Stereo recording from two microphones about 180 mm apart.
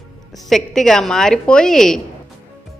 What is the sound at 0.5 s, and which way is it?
A woman's voice, centre (ahead or behind).